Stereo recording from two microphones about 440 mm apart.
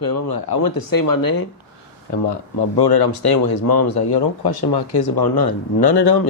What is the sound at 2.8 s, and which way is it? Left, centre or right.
Speech, left.